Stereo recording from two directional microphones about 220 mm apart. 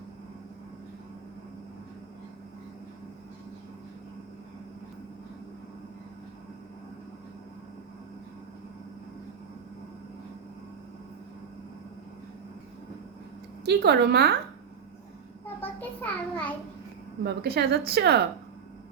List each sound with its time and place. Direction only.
13.7 s a woman's voice: 50° right (ahead or behind)
15.4 s a sound: 10° left (ahead or behind)
17.2 s a woman's voice: 45° right (ahead or behind)